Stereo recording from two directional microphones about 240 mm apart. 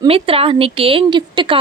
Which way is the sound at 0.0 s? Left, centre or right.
Right.